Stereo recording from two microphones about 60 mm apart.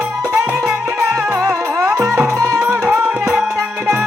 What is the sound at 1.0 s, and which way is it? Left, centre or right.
Music, right.